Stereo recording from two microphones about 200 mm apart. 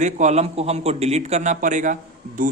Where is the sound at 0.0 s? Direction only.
35° right (ahead or behind).